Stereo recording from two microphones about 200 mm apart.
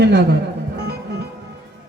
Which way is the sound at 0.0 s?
55° right (ahead or behind).